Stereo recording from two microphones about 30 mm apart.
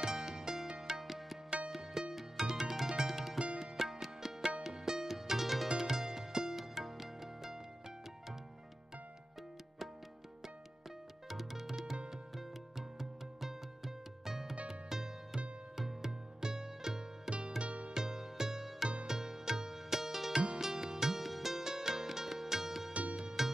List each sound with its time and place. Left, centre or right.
0.0 s music: centre
1.0 s music: centre
11.2 s music: centre
17.6 s music: right
17.9 s music: centre
21.2 s music: centre